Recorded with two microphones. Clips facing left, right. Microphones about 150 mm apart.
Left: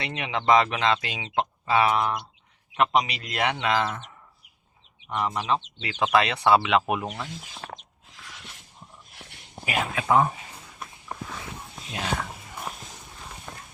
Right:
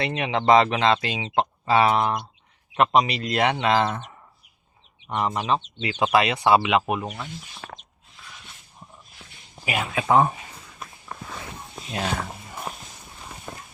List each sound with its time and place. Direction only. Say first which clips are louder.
0.0 s speech: right 4 dB; 35° right (ahead or behind)
6.1 s speech: right 1 dB; 10° right (ahead or behind)
6.8 s speech: right 1 dB; centre (ahead or behind)
7.6 s a sound: left 2 dB; 40° left (ahead or behind)
9.6 s speech: right 2 dB; 15° right (ahead or behind)
11.1 s walk: left 2 dB; 20° left (ahead or behind)
13.5 s run: right 5 dB; 35° right (ahead or behind)